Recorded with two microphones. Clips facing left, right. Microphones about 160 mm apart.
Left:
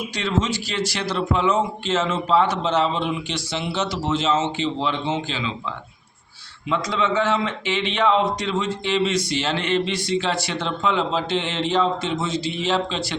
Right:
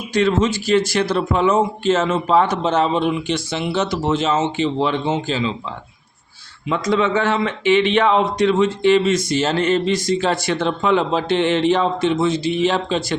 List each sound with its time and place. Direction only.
0.1 s a man's voice: 50° right (ahead or behind)
6.7 s a man's voice: 50° right (ahead or behind)